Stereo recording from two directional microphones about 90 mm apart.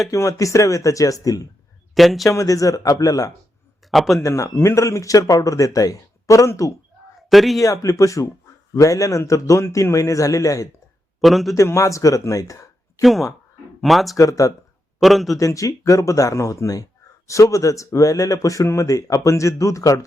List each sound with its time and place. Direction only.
0.1 s speech: 40° left (ahead or behind)
2.0 s a man's voice: centre (ahead or behind)
2.2 s speech: 40° left (ahead or behind)
3.9 s a man's voice: centre (ahead or behind)
4.2 s speech: 35° left (ahead or behind)
7.2 s a man's voice: centre (ahead or behind)
7.6 s speech: 40° left (ahead or behind)
11.2 s a man's voice: centre (ahead or behind)
11.5 s speech: 35° left (ahead or behind)
13.0 s a man's voice: centre (ahead or behind)
14.2 s speech: 40° left (ahead or behind)
15.0 s a man's voice: centre (ahead or behind)
15.4 s speech: 35° left (ahead or behind)